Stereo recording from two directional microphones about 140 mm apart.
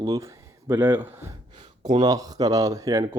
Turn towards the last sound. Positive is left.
turn(degrees=-25)  # may be behind; listen again after turning